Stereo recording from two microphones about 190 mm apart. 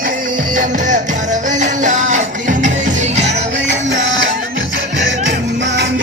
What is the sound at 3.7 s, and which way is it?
Music, 75° right (ahead or behind).